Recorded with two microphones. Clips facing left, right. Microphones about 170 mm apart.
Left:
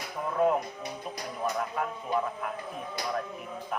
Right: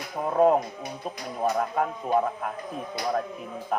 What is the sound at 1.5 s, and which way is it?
Speech, 45° right (ahead or behind).